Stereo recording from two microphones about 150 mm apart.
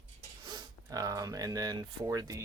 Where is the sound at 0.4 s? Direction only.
25° right (ahead or behind).